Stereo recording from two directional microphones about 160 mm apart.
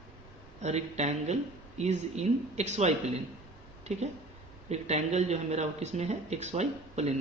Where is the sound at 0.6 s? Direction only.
45° right (ahead or behind).